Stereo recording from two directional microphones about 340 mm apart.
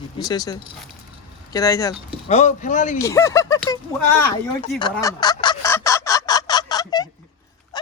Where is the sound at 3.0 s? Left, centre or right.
Centre.